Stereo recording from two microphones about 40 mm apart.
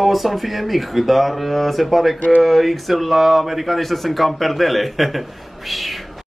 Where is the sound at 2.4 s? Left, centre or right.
Centre.